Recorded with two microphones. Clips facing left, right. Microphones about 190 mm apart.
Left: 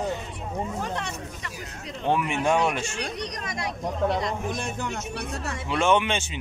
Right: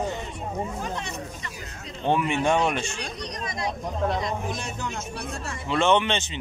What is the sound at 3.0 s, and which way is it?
Chatter, 70° left (ahead or behind).